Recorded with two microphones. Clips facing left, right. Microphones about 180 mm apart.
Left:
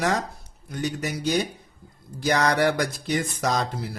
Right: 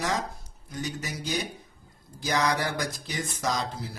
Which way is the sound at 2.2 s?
65° left (ahead or behind).